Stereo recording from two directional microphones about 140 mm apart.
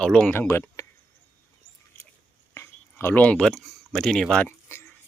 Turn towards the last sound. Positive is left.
turn(degrees=5)  # may be behind; listen again after turning